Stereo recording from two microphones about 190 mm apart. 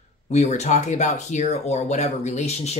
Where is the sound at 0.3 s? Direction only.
35° left (ahead or behind).